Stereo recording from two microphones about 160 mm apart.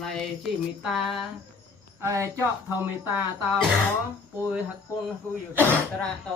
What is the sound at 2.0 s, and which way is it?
Speech, 20° right (ahead or behind).